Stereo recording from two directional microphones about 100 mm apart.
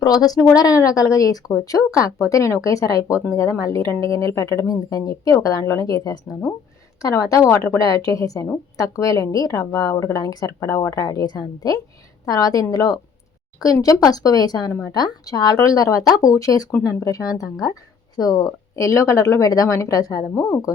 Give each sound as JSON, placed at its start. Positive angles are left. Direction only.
{"t": 0.0, "sound": "speech", "side_deg": 40}
{"t": 14.7, "sound": "speech", "side_deg": 25}
{"t": 14.9, "sound": "speech", "side_deg": 45}